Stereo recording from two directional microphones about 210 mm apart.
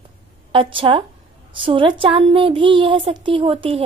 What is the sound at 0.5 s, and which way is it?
Speech, 25° right (ahead or behind).